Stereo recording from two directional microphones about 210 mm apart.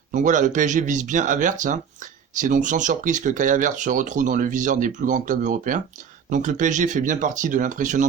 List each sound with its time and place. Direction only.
0.1 s speech: 35° right (ahead or behind)